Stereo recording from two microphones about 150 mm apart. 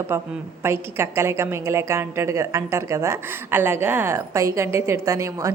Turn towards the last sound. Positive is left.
turn(degrees=-20)  # may be behind; listen again after turning